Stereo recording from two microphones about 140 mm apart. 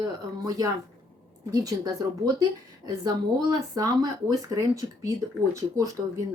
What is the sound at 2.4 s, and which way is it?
Speech, 25° right (ahead or behind).